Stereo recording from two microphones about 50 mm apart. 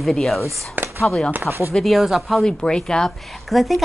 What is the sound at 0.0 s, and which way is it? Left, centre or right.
Speech, centre.